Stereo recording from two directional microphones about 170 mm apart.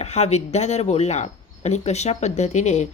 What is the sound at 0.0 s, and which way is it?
A woman's voice, 40° left (ahead or behind).